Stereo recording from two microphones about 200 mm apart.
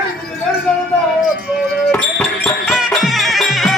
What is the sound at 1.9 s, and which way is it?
Music, 5° left (ahead or behind).